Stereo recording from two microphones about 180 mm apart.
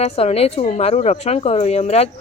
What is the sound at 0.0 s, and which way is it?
Speech, 35° left (ahead or behind).